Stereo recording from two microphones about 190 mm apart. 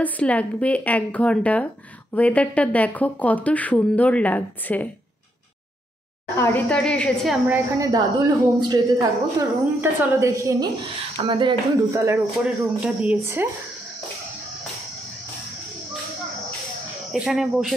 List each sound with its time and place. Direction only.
0.0 s speech: 5° left (ahead or behind)
6.3 s a woman's voice: 10° left (ahead or behind)
7.4 s speech: 10° right (ahead or behind)
8.5 s speech: 20° right (ahead or behind)
17.1 s a woman's voice: centre (ahead or behind)